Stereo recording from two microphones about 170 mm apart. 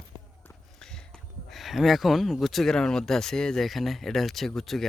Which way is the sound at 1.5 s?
Centre (ahead or behind).